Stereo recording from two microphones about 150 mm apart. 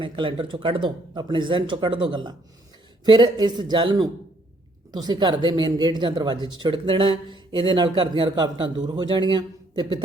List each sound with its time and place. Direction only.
0.0 s a man's voice: 35° right (ahead or behind)